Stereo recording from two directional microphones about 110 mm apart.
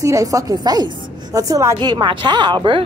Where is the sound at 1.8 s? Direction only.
40° right (ahead or behind).